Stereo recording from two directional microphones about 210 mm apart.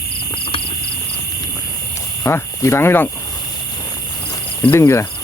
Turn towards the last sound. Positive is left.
turn(degrees=10)  # may be behind; listen again after turning